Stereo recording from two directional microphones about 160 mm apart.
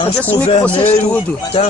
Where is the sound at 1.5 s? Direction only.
35° left (ahead or behind).